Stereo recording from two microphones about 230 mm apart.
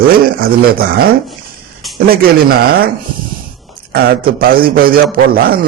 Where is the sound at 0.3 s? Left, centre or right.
Right.